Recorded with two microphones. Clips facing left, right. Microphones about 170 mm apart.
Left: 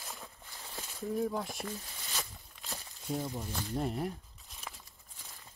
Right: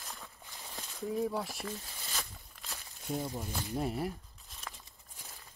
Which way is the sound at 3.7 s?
5° right (ahead or behind).